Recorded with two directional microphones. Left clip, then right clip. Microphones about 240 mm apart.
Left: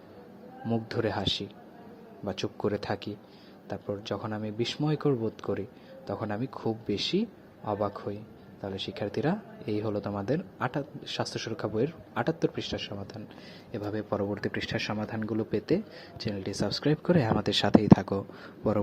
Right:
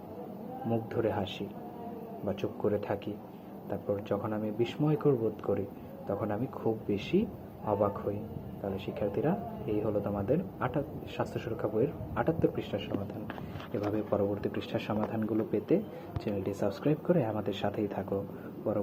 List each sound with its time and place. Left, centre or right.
0.7 s speech: left
13.8 s speech: left